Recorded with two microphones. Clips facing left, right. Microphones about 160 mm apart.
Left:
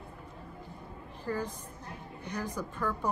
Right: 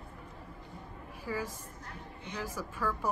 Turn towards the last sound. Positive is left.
turn(degrees=-5)  # may be behind; listen again after turning